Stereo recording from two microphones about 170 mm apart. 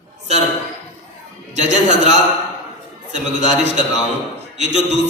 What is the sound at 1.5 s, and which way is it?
Speech, 45° right (ahead or behind).